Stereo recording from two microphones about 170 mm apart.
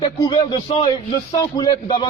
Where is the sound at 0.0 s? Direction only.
30° left (ahead or behind).